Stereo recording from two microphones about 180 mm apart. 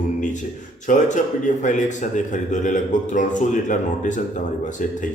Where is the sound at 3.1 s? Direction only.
45° left (ahead or behind).